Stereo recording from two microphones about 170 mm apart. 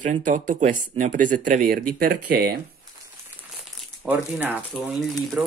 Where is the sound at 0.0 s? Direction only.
45° right (ahead or behind); by 2.6 s 70° right (ahead or behind).